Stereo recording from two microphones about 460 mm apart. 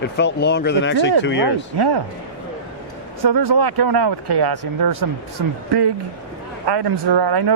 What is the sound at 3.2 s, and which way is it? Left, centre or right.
Speech, right.